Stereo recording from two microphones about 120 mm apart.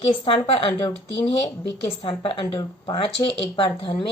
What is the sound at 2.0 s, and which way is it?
A woman's voice, 45° left (ahead or behind).